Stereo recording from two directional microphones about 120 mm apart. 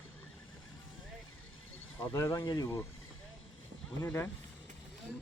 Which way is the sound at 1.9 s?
25° left (ahead or behind).